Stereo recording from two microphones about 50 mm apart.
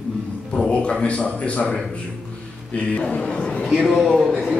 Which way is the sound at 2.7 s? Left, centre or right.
Left.